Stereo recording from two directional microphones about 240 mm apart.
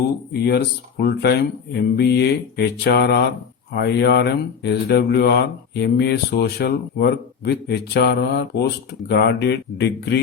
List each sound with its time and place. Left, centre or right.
0.4 s speech: left